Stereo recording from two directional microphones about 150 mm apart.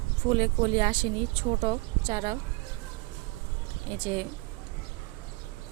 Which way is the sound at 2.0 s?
35° right (ahead or behind).